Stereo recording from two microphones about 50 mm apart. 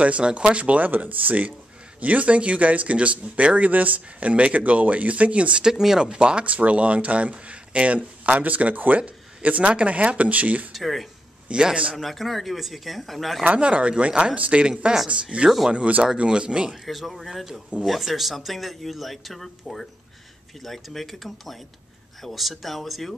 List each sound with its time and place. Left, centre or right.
0.0 s speech: right
5.6 s speech: centre; by 10.7 s right
10.7 s speech: centre
11.4 s speech: right
12.0 s speech: centre
13.6 s speech: right
16.8 s speech: centre